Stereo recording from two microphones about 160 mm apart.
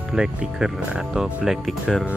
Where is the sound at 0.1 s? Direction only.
5° right (ahead or behind).